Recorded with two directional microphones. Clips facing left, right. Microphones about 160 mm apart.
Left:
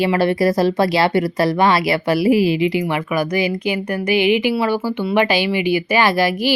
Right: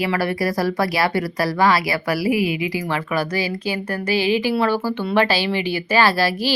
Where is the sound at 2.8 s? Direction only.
15° left (ahead or behind).